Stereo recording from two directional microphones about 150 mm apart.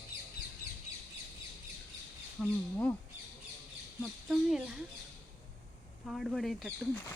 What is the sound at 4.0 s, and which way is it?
Speech, 5° right (ahead or behind).